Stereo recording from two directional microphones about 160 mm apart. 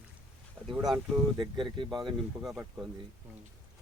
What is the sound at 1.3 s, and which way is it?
Speech, 30° right (ahead or behind).